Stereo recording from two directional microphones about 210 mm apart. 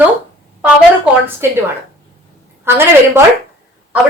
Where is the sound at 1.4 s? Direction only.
10° right (ahead or behind).